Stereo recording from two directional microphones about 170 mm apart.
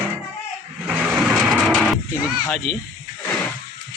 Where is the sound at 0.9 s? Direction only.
10° right (ahead or behind).